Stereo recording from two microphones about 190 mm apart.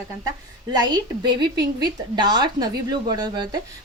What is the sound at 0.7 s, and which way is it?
A woman's voice, 20° right (ahead or behind).